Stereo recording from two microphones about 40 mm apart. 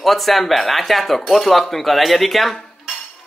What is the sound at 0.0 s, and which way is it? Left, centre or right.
Speech, centre.